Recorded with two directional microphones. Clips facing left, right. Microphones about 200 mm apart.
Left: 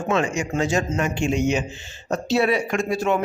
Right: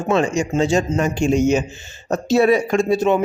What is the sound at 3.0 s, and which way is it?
Speech, 20° right (ahead or behind).